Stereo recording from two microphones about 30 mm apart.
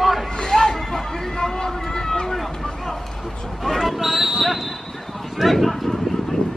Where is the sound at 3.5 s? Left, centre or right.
Centre.